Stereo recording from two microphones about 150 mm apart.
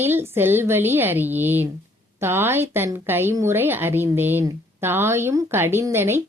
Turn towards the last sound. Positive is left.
turn(degrees=-15)  # may be behind; listen again after turning